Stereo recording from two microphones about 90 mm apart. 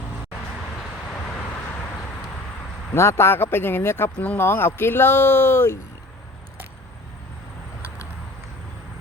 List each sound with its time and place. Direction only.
2.9 s speech: 30° left (ahead or behind)